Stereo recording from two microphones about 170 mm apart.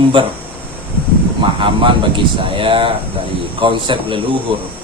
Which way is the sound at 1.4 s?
30° right (ahead or behind).